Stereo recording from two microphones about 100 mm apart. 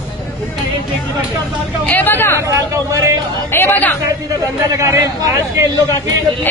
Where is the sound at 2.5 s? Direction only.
30° right (ahead or behind).